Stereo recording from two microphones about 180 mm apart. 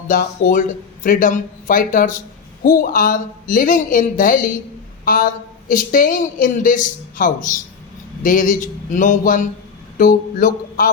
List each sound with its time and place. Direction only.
0.1 s a woman's voice: 50° left (ahead or behind)